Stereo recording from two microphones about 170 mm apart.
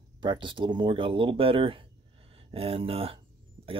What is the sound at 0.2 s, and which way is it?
Speech, 30° right (ahead or behind).